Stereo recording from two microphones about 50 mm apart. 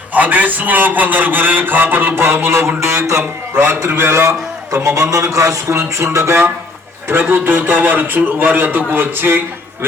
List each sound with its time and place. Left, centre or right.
0.1 s a man's voice: right
3.5 s a man's voice: right
7.1 s a man's voice: right